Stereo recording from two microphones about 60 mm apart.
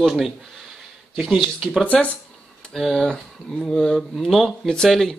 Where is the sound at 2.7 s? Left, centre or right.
Centre.